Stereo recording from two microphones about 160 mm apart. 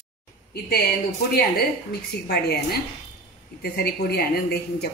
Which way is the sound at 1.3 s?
75° left (ahead or behind).